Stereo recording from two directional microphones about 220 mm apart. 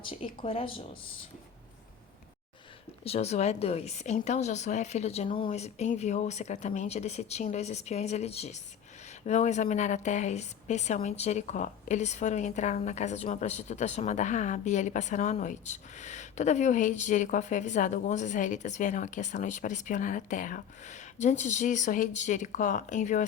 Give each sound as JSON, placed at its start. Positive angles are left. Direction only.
{"t": 0.0, "sound": "speech", "side_deg": 25}
{"t": 3.0, "sound": "a woman's voice", "side_deg": 30}